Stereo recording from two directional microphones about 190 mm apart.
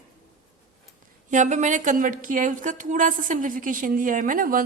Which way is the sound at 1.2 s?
40° right (ahead or behind).